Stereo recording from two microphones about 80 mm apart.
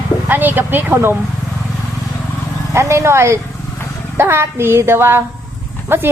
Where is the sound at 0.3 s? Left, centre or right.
Right.